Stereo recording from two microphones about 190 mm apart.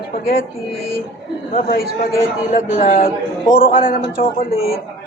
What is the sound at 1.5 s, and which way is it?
A man's voice, 50° left (ahead or behind).